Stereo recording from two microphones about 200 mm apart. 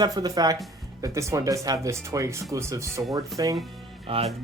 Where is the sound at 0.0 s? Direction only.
20° right (ahead or behind).